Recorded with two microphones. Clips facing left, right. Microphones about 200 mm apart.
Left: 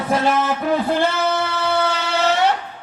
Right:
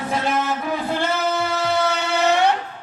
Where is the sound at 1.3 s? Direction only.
20° right (ahead or behind).